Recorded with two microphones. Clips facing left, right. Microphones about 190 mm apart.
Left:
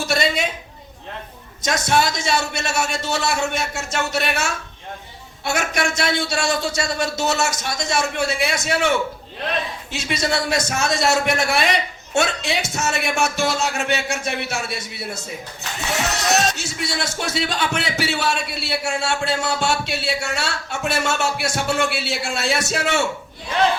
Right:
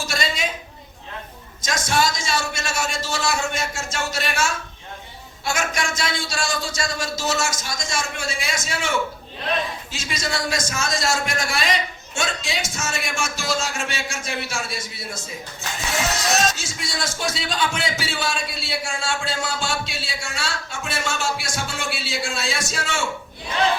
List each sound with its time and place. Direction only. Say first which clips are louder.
0.0 s a sound: left 6 dB; 60° left (ahead or behind)
1.6 s speech: left 3 dB; 60° left (ahead or behind)
5.5 s speech: left 3 dB; 65° left (ahead or behind)
9.9 s speech: left 9 dB; 65° left (ahead or behind)